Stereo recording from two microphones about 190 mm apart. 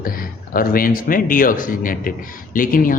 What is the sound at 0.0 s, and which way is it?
A man's voice, 50° left (ahead or behind).